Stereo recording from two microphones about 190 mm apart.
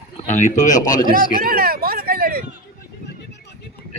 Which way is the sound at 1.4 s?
50° right (ahead or behind).